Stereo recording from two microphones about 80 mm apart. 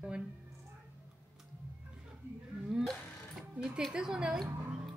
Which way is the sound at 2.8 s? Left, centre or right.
Centre.